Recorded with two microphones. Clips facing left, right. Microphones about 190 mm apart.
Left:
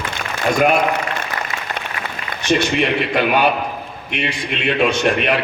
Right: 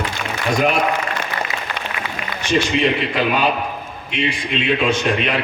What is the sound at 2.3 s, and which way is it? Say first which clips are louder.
A man's voice: left 1 dB; 60° left (ahead or behind).